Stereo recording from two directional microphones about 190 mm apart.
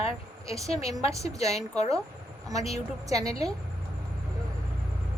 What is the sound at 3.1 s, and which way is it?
Speech, 20° right (ahead or behind).